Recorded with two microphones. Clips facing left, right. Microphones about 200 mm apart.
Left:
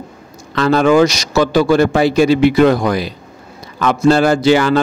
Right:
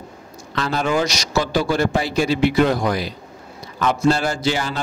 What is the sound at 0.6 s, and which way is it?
A man's voice, 75° left (ahead or behind).